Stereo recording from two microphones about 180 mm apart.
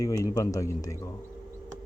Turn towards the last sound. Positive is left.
turn(degrees=20)  # may be behind; listen again after turning